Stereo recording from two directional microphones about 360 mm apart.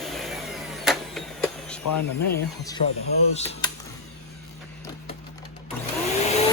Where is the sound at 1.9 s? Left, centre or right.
Left.